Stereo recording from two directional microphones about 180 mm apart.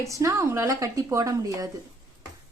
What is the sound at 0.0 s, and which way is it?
Speech, 15° right (ahead or behind).